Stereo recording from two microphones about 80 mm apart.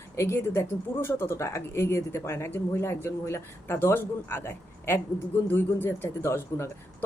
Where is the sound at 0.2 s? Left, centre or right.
Left.